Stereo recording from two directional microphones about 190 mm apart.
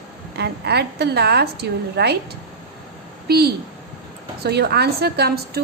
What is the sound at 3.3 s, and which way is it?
A woman's voice, 55° right (ahead or behind).